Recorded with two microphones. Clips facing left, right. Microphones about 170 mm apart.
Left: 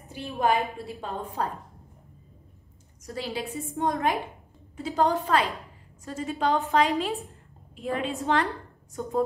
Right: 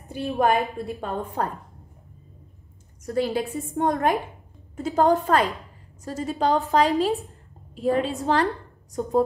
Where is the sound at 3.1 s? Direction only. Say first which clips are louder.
Right 8 dB; 50° right (ahead or behind).